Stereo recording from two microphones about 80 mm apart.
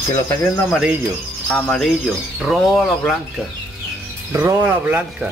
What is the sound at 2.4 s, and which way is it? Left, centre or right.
Speech, centre.